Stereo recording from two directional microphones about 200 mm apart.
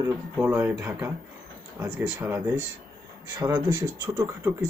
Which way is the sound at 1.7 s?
10° right (ahead or behind).